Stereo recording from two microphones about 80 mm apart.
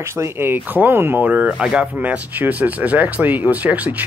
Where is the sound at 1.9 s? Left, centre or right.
Centre.